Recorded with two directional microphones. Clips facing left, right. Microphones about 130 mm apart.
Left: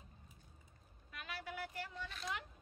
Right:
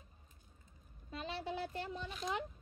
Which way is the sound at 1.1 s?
25° right (ahead or behind).